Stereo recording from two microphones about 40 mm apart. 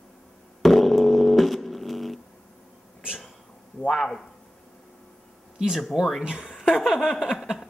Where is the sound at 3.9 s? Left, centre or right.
Centre.